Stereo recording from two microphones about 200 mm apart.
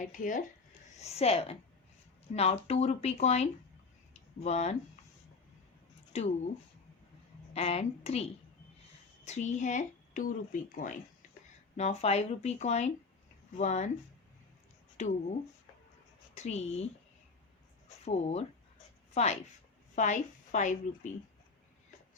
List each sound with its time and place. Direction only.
0.0 s a woman's voice: 40° left (ahead or behind)
6.1 s speech: 35° left (ahead or behind)
7.5 s speech: 30° left (ahead or behind)
14.9 s speech: 35° left (ahead or behind)
18.0 s speech: 30° left (ahead or behind)